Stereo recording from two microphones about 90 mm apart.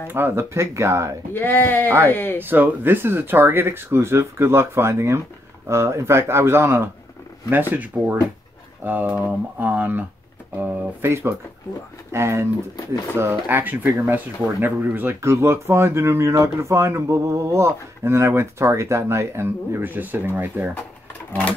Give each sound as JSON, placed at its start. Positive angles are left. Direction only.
{"t": 0.1, "sound": "speech", "side_deg": -25}
{"t": 1.3, "sound": "speech", "side_deg": 25}
{"t": 2.4, "sound": "speech", "side_deg": -20}